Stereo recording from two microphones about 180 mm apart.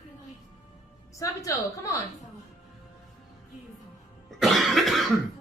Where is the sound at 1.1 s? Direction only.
15° left (ahead or behind).